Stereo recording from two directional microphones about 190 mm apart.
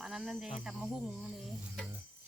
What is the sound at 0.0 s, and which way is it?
Cricket, centre (ahead or behind).